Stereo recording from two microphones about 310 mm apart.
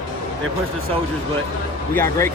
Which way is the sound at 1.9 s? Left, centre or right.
Centre.